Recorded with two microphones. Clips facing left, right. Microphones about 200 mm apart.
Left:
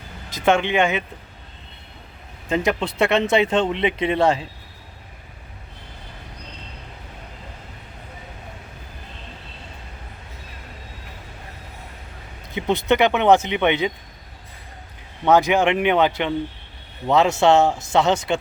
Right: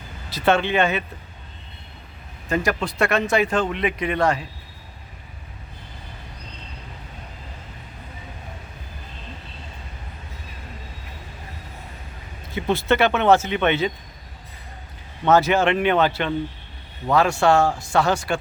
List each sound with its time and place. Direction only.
0.4 s speech: 15° left (ahead or behind)
2.5 s speech: 20° left (ahead or behind)
12.5 s speech: 20° left (ahead or behind)
15.2 s speech: 15° left (ahead or behind)